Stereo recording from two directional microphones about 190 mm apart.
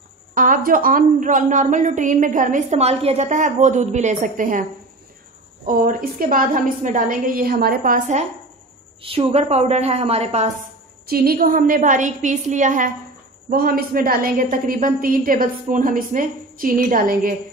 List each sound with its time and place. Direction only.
0.3 s a woman's voice: 45° right (ahead or behind)
5.7 s a woman's voice: 45° right (ahead or behind)
9.0 s a woman's voice: 30° right (ahead or behind)
11.1 s a woman's voice: 55° right (ahead or behind)